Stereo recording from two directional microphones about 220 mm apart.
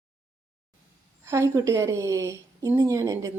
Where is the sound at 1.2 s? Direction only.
15° right (ahead or behind).